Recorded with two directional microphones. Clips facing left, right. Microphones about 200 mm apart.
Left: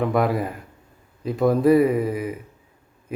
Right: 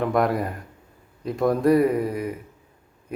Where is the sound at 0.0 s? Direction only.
Centre (ahead or behind).